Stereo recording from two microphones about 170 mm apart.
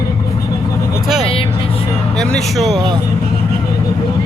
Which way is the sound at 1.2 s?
35° left (ahead or behind).